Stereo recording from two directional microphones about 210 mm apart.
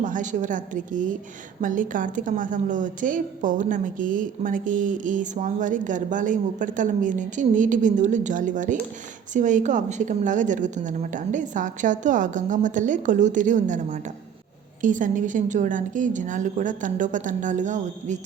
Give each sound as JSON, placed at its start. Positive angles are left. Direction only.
{"t": 0.0, "sound": "a woman's voice", "side_deg": -35}